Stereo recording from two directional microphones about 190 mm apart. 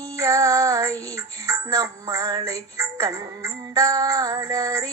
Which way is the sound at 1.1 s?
15° right (ahead or behind).